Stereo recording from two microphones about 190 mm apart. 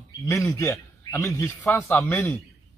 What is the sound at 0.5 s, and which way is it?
A man's voice, 15° left (ahead or behind).